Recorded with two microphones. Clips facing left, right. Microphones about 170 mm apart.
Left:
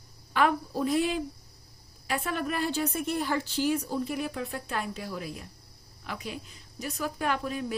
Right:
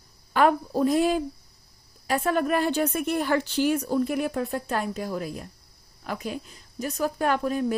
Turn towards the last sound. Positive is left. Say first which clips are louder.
# right 6 dB
turn(degrees=-45)  # may be behind; listen again after turning